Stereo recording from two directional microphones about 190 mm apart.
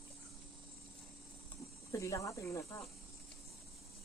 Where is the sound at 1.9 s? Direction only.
15° left (ahead or behind).